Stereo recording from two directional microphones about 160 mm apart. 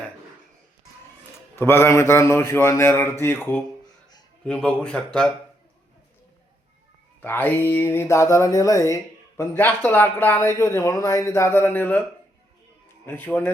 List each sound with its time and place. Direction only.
1.5 s speech: 15° left (ahead or behind)
7.2 s speech: 10° left (ahead or behind)
13.1 s speech: 10° left (ahead or behind)